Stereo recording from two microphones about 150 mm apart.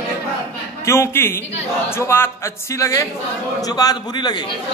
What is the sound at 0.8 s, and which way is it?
A man's voice, 20° left (ahead or behind).